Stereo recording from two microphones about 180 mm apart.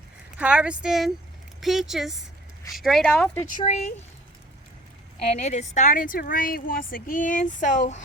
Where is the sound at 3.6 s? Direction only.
40° left (ahead or behind).